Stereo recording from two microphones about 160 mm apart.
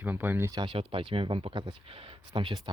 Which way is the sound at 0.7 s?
35° right (ahead or behind).